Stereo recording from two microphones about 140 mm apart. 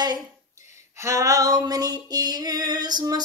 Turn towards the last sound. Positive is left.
turn(degrees=-30)  # may be behind; listen again after turning